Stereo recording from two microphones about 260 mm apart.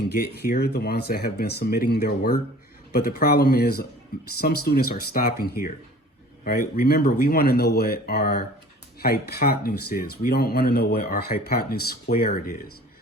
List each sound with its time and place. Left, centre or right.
0.1 s speech: left